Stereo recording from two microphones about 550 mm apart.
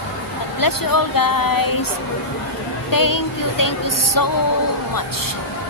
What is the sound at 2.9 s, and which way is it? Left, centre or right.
A woman's voice, left.